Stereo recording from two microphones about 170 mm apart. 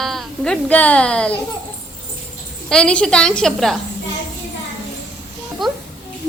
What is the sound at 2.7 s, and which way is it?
A woman's voice, 5° left (ahead or behind).